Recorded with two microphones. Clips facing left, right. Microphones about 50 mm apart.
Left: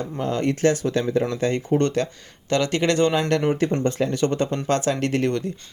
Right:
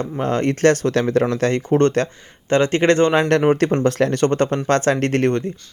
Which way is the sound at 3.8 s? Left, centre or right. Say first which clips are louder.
Right 5 dB; right.